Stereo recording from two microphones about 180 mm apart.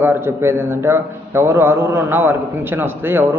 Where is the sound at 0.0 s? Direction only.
10° right (ahead or behind).